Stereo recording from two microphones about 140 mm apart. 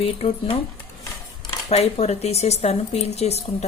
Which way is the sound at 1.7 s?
50° left (ahead or behind).